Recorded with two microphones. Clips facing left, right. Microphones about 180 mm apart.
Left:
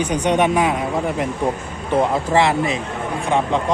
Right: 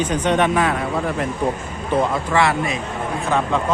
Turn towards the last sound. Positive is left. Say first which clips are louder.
# left 1 dB
turn(degrees=20)  # may be behind; listen again after turning